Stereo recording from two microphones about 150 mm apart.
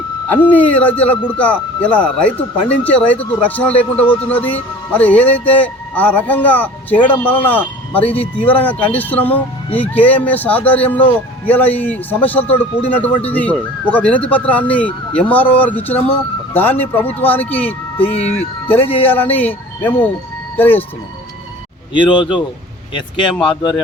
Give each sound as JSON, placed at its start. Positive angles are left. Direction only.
{"t": 0.3, "sound": "speech", "side_deg": 10}
{"t": 8.1, "sound": "speech", "side_deg": 40}
{"t": 8.4, "sound": "speech", "side_deg": 10}
{"t": 18.0, "sound": "speech", "side_deg": 40}
{"t": 18.9, "sound": "speech", "side_deg": 10}
{"t": 21.9, "sound": "speech", "side_deg": 35}